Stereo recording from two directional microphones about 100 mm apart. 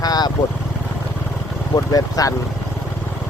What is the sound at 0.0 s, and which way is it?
Vehicle, 40° left (ahead or behind).